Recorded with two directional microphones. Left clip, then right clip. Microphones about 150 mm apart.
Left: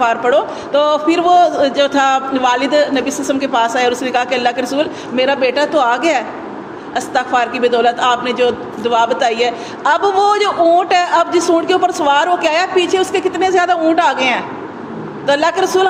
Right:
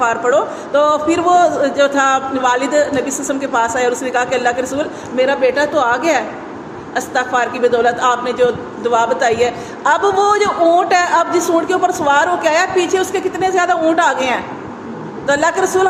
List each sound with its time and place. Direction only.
0.0 s a man's voice: 30° left (ahead or behind)